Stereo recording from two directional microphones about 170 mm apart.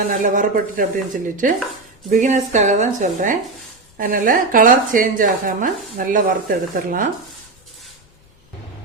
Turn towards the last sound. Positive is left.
turn(degrees=-55)  # may be behind; listen again after turning